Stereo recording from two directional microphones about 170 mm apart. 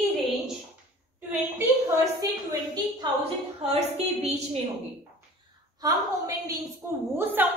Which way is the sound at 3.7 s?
35° right (ahead or behind).